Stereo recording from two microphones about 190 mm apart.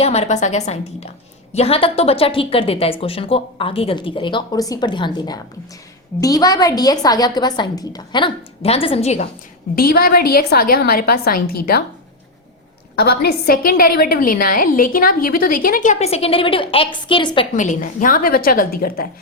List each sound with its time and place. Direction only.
0.0 s a woman's voice: 35° left (ahead or behind)
9.7 s a woman's voice: 50° left (ahead or behind)
13.0 s a woman's voice: 55° left (ahead or behind); by 17.4 s 25° left (ahead or behind)
17.6 s a woman's voice: 45° left (ahead or behind)